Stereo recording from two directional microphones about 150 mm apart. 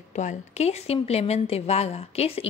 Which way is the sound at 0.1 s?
50° left (ahead or behind).